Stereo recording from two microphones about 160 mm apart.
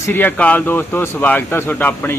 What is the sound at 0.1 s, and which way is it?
A man's voice, 10° left (ahead or behind).